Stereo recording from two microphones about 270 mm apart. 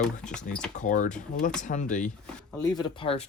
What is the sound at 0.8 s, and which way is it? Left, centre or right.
Speech, left.